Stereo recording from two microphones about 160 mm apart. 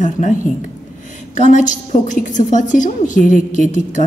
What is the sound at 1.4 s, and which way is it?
A woman's voice, 55° left (ahead or behind).